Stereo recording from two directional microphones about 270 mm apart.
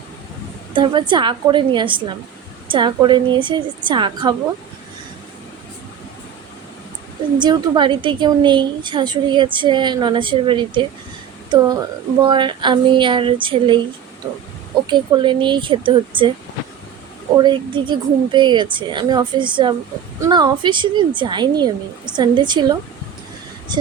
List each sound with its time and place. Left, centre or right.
0.7 s a woman's voice: centre
7.3 s a woman's voice: centre
14.8 s a woman's voice: centre
17.3 s a woman's voice: centre